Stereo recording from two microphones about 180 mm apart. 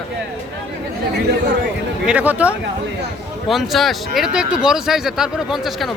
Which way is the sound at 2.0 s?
10° right (ahead or behind).